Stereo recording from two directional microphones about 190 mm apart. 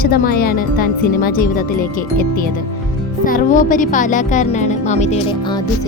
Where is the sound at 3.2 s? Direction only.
45° left (ahead or behind).